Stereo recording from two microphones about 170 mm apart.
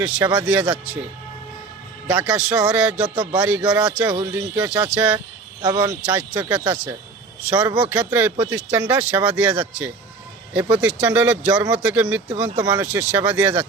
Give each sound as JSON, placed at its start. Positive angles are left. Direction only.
{"t": 0.3, "sound": "speech", "side_deg": -5}
{"t": 2.0, "sound": "speech", "side_deg": -5}
{"t": 4.3, "sound": "speech", "side_deg": -20}
{"t": 4.5, "sound": "speech", "side_deg": -5}
{"t": 5.6, "sound": "speech", "side_deg": -25}
{"t": 6.1, "sound": "speech", "side_deg": -10}
{"t": 12.5, "sound": "speech", "side_deg": -25}
{"t": 12.8, "sound": "speech", "side_deg": -10}